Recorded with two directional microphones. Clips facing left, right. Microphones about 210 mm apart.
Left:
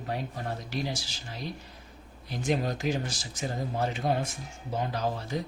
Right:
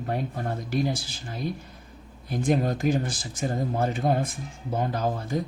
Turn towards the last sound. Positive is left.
turn(degrees=-50)  # may be behind; listen again after turning